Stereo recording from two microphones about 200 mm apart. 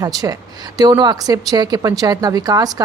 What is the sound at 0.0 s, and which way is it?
A woman's voice, 20° right (ahead or behind).